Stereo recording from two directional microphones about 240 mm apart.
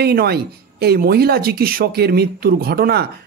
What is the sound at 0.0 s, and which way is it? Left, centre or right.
Speech, right.